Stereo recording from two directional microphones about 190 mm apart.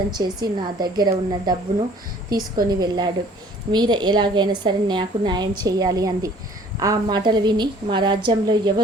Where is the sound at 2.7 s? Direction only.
20° right (ahead or behind).